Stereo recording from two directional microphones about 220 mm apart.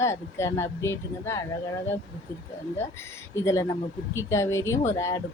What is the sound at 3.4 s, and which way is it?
Speech, 15° left (ahead or behind).